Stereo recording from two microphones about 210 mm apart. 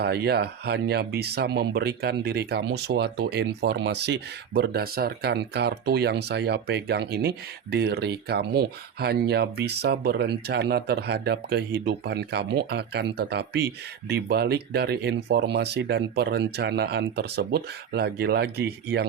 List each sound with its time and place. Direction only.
0.0 s speech: 50° right (ahead or behind)